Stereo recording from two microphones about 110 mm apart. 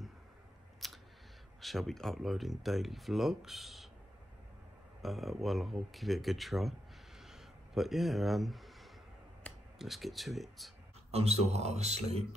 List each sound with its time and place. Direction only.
0.8 s scissors: centre (ahead or behind)
1.6 s speech: centre (ahead or behind)
5.0 s speech: centre (ahead or behind)
7.2 s a sound: 5° right (ahead or behind)
9.8 s speech: centre (ahead or behind)
11.1 s speech: 70° right (ahead or behind)